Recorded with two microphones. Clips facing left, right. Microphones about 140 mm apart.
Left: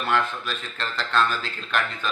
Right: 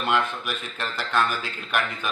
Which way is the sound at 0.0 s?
20° right (ahead or behind).